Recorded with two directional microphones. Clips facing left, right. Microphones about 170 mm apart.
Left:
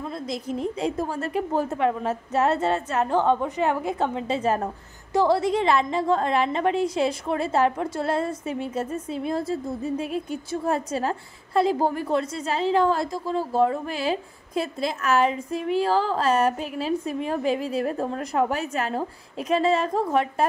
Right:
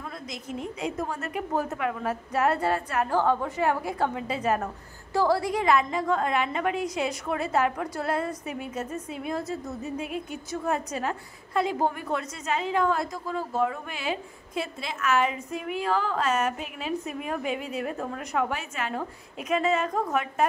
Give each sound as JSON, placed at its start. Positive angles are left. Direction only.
{"t": 0.0, "sound": "a woman's voice", "side_deg": 30}